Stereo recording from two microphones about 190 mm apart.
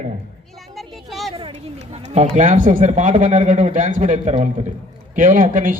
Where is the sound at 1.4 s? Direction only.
30° right (ahead or behind).